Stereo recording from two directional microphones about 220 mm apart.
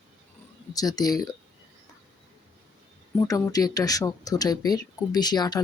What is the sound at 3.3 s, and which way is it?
Speech, 15° left (ahead or behind).